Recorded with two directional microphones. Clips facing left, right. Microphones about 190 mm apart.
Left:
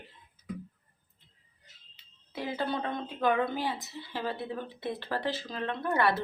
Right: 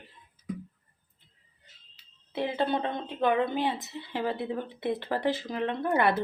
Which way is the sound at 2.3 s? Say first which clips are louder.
Right 4 dB; 25° right (ahead or behind).